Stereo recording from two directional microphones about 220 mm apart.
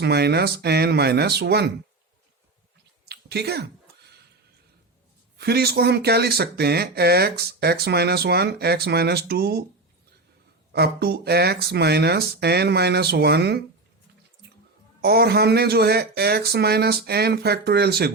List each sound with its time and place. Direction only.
0.0 s speech: 50° right (ahead or behind)
3.1 s a sound: 50° right (ahead or behind)
5.4 s speech: 45° right (ahead or behind)
10.7 s speech: 45° right (ahead or behind)
15.0 s speech: 45° right (ahead or behind)